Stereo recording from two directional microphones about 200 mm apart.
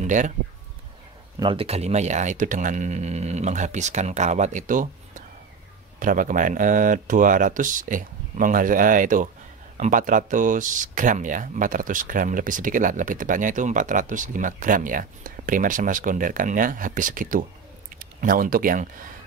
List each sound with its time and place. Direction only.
0.0 s speech: 40° right (ahead or behind)
1.4 s speech: 25° right (ahead or behind); by 19.0 s 45° right (ahead or behind)